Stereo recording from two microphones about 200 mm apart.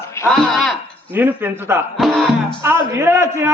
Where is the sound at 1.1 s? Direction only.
10° right (ahead or behind).